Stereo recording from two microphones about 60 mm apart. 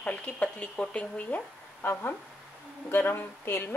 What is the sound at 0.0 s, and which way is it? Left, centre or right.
Speech, left.